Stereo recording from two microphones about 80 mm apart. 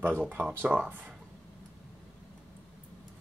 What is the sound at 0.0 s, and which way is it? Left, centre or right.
Speech, right.